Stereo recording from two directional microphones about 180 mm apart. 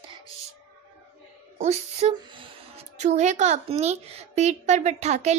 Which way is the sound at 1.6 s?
40° right (ahead or behind).